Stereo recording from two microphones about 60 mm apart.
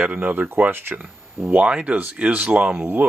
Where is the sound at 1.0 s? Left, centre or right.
Right.